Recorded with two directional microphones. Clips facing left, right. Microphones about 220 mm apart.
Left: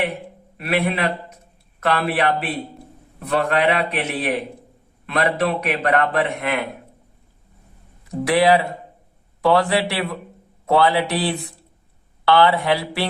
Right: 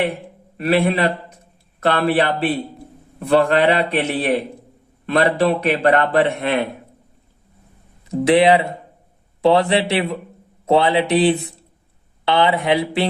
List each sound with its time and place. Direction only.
0.5 s a man's voice: 30° right (ahead or behind)
8.2 s speech: 25° right (ahead or behind)